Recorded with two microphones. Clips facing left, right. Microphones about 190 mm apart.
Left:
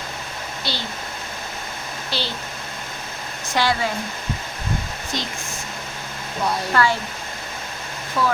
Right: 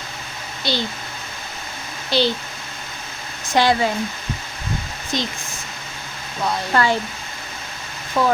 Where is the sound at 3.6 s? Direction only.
20° right (ahead or behind).